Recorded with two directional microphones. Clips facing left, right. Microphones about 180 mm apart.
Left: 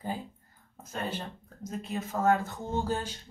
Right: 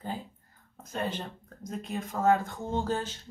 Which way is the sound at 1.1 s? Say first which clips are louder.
Even; 5° left (ahead or behind).